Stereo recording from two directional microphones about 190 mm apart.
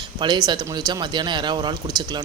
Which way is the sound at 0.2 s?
20° right (ahead or behind).